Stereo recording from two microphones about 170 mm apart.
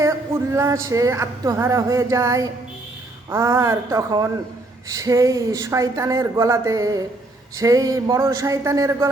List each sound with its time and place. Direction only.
0.5 s speech: 15° right (ahead or behind)